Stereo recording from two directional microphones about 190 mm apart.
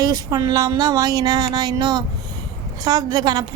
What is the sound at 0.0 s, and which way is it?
Speech, 20° right (ahead or behind).